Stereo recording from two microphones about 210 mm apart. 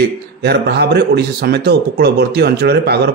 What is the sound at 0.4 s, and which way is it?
Speech, 50° right (ahead or behind).